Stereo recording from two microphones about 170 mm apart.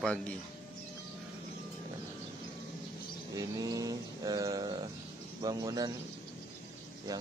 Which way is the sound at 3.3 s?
20° right (ahead or behind).